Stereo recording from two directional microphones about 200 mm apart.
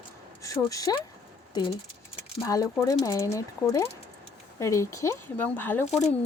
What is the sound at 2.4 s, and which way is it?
Speech, 15° left (ahead or behind).